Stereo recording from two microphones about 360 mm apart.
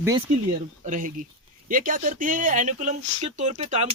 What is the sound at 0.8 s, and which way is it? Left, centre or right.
A man's voice, right.